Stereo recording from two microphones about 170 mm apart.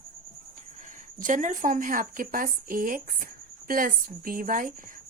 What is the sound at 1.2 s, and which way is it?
Speech, 50° right (ahead or behind).